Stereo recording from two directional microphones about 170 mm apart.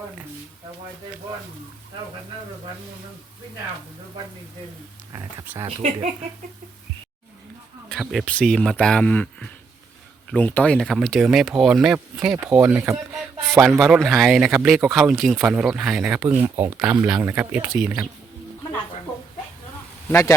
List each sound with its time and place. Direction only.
5.1 s speech: 15° right (ahead or behind)
5.6 s speech: 35° right (ahead or behind)
7.9 s speech: centre (ahead or behind); by 13.0 s 15° right (ahead or behind)
13.6 s speech: centre (ahead or behind)
20.1 s a man's voice: 15° left (ahead or behind)